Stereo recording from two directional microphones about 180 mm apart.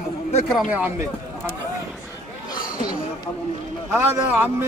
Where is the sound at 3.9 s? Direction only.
10° right (ahead or behind).